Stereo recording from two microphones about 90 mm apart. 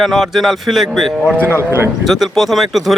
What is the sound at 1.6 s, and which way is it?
Speech, 30° right (ahead or behind).